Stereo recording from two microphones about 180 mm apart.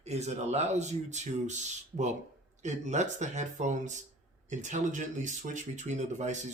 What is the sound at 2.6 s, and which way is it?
A man's voice, 40° right (ahead or behind).